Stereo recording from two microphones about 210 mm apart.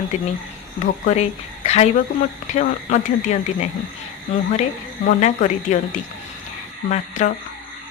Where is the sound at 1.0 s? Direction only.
30° left (ahead or behind).